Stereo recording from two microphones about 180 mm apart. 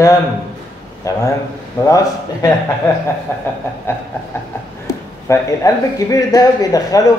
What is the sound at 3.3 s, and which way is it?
Speech, 15° left (ahead or behind).